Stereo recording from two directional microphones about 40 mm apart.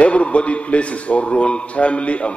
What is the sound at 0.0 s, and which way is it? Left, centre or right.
A man's voice, left.